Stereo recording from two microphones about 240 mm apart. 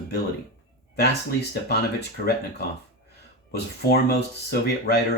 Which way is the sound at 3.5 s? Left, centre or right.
Left.